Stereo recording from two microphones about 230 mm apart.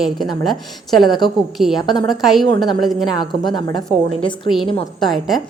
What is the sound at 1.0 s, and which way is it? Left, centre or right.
Speech, centre.